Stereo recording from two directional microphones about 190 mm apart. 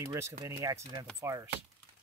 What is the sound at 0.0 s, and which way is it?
Speech, 15° right (ahead or behind).